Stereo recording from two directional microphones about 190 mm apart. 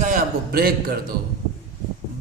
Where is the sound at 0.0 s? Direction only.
45° right (ahead or behind).